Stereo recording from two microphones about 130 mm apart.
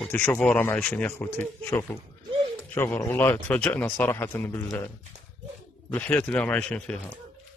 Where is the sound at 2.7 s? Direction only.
15° left (ahead or behind).